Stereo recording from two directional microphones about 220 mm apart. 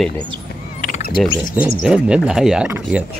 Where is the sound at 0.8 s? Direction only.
35° left (ahead or behind).